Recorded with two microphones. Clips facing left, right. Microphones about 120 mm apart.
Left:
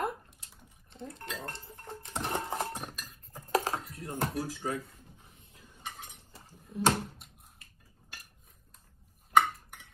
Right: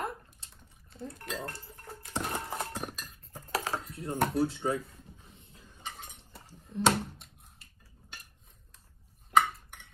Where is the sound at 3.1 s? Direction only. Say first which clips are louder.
Left 10 dB; 40° left (ahead or behind).